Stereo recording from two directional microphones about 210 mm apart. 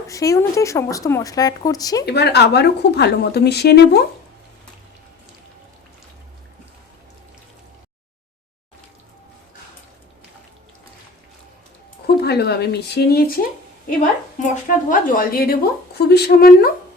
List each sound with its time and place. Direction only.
0.1 s speech: 15° left (ahead or behind)
2.0 s a woman's voice: 50° left (ahead or behind)
12.0 s a woman's voice: 50° left (ahead or behind)